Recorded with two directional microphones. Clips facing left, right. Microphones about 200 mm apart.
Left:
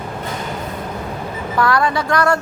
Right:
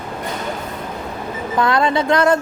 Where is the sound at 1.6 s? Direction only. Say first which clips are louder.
Right 1 dB; 20° right (ahead or behind).